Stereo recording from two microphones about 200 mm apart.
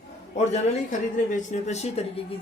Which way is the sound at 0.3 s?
35° left (ahead or behind).